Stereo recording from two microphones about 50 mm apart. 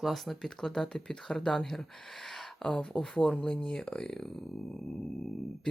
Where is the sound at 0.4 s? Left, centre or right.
Centre.